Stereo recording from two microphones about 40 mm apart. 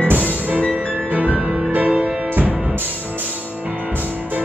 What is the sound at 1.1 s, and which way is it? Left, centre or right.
Music, right.